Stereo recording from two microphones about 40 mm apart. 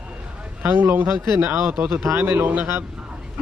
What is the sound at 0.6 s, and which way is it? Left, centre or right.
A man's voice, right.